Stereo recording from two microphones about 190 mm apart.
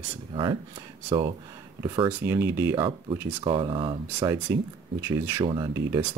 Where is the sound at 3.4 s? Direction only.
25° right (ahead or behind).